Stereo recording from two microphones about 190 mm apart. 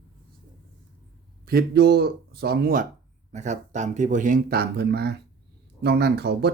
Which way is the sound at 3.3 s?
40° right (ahead or behind).